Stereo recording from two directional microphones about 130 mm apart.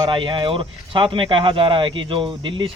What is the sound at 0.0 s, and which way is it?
Speech, 40° right (ahead or behind).